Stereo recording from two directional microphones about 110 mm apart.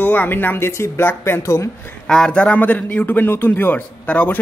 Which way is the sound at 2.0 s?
5° left (ahead or behind).